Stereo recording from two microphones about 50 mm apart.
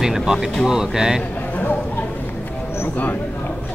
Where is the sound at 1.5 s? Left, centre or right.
Left.